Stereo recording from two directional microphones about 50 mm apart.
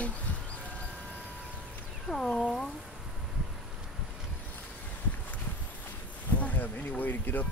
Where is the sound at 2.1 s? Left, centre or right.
Centre.